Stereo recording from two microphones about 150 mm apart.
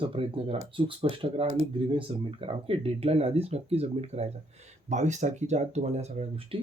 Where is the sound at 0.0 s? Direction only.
40° right (ahead or behind).